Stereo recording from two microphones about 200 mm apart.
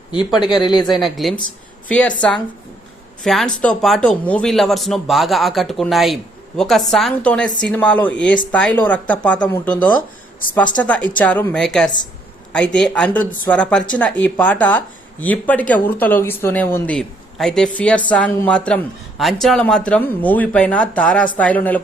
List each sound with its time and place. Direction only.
0.5 s speech: 20° left (ahead or behind)
0.9 s speech: centre (ahead or behind)
3.2 s speech: 5° left (ahead or behind)